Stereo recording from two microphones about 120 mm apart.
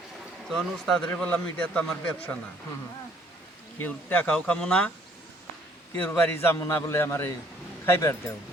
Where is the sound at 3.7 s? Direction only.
10° left (ahead or behind).